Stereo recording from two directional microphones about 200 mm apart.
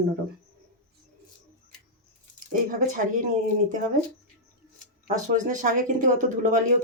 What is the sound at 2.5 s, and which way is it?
Speech, 40° right (ahead or behind).